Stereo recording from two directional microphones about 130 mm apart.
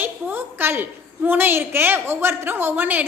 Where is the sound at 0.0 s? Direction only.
15° right (ahead or behind).